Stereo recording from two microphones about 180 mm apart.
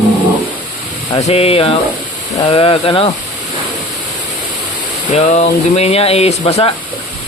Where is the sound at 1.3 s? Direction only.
35° left (ahead or behind).